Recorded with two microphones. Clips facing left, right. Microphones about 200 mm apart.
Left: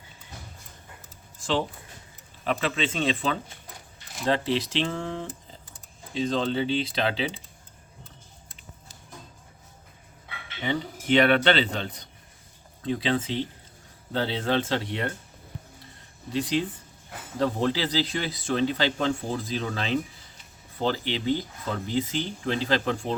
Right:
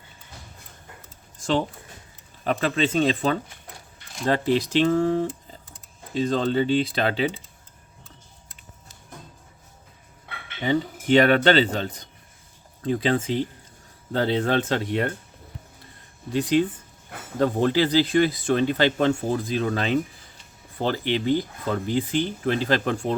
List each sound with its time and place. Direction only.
2.4 s speech: 45° right (ahead or behind)
10.2 s speech: 45° right (ahead or behind)
16.3 s speech: 50° right (ahead or behind)